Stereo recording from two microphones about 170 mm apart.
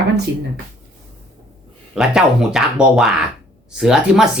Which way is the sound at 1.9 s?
5° right (ahead or behind).